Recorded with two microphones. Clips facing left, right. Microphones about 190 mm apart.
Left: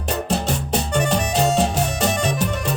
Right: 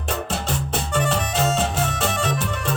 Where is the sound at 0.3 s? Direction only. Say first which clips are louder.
Left 4 dB; 40° left (ahead or behind).